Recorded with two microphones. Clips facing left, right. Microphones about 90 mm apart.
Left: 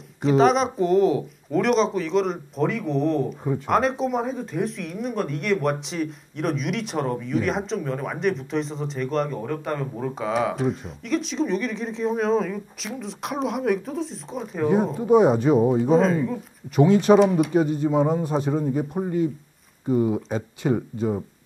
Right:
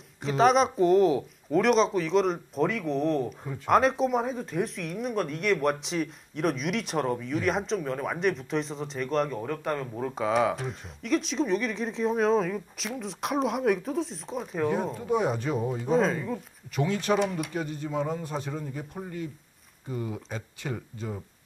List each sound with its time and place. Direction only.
0.2 s speech: centre (ahead or behind)
15.0 s speech: 15° left (ahead or behind)
15.8 s speech: centre (ahead or behind)
16.8 s speech: 20° left (ahead or behind)
17.2 s speech: centre (ahead or behind)
17.5 s speech: 15° left (ahead or behind)